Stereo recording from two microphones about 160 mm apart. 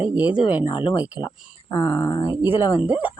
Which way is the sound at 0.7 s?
30° left (ahead or behind).